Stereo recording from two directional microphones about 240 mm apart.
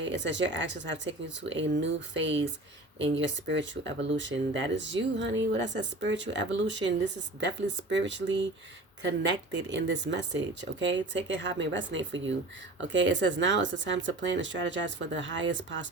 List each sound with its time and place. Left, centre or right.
0.0 s speech: right
9.7 s speech: right